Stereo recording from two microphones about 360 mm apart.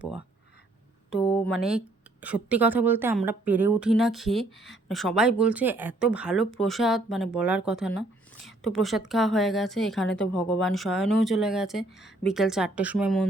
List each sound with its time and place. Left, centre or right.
1.3 s a woman's voice: centre
4.5 s speech: left
4.9 s a woman's voice: centre